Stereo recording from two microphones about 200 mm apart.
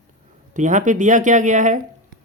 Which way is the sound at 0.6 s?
40° right (ahead or behind).